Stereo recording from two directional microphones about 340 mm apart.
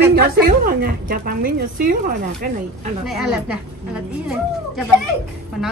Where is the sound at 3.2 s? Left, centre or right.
Centre.